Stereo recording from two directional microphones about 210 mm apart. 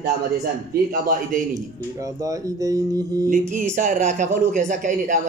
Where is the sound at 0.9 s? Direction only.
40° right (ahead or behind).